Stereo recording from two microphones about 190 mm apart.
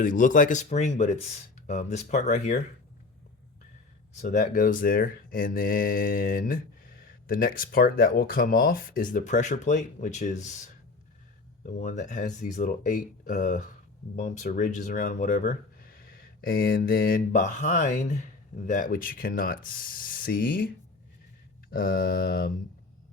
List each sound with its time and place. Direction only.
0.0 s speech: 45° left (ahead or behind)
4.2 s speech: 40° left (ahead or behind)
21.7 s speech: 50° left (ahead or behind)